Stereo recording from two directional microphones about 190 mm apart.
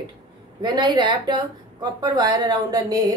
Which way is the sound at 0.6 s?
25° right (ahead or behind).